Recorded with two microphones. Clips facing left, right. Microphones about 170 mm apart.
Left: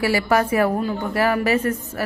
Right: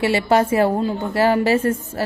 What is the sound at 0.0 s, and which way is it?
A woman's voice, 25° right (ahead or behind).